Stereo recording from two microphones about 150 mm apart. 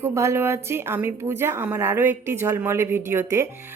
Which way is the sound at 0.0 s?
20° right (ahead or behind).